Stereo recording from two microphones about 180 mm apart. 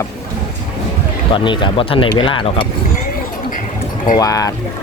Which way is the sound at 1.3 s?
25° left (ahead or behind).